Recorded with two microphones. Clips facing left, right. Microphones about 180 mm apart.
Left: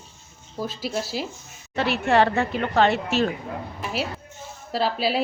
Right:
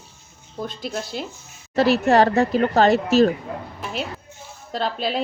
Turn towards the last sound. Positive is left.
turn(degrees=5)  # may be behind; listen again after turning